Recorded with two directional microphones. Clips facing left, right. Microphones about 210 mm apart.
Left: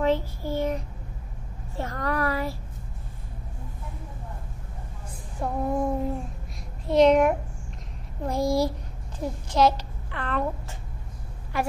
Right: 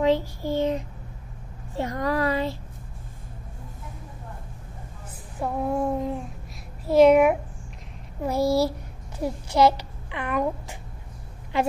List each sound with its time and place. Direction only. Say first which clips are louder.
0.0 s a child's voice: right 2 dB; 15° right (ahead or behind)
5.4 s a sound: right 1 dB; centre (ahead or behind)
6.9 s a child's voice: right 3 dB; 5° right (ahead or behind)